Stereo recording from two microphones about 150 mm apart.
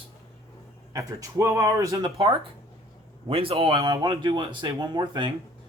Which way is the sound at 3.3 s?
35° right (ahead or behind).